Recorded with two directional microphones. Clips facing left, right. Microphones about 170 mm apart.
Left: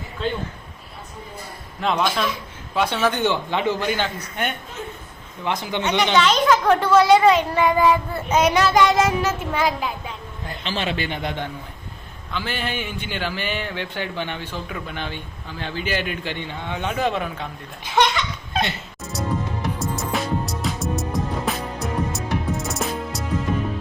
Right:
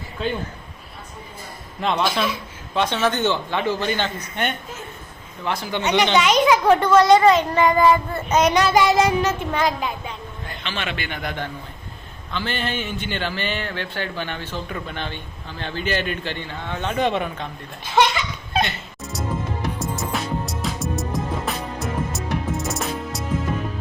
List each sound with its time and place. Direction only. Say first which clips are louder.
1.8 s a man's voice: even; centre (ahead or behind)
5.5 s speech: even; 20° left (ahead or behind)
5.8 s a child's voice: right 1 dB; 10° right (ahead or behind)
6.7 s speech: right 1 dB; 5° left (ahead or behind)
10.6 s a man's voice: left 4 dB; 35° left (ahead or behind)
12.3 s speech: right 1 dB; 10° left (ahead or behind)
18.5 s music: right 2 dB; centre (ahead or behind)